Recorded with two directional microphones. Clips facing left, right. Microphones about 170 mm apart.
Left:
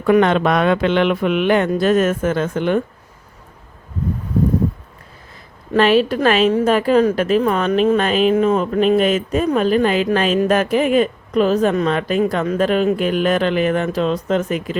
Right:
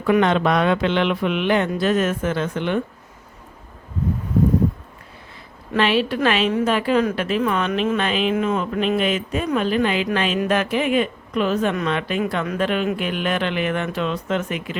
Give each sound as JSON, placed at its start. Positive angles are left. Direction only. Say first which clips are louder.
{"t": 0.1, "sound": "speech", "louder": "left 3 dB", "side_deg": 55}
{"t": 5.7, "sound": "a woman's voice", "louder": "left 5 dB", "side_deg": 45}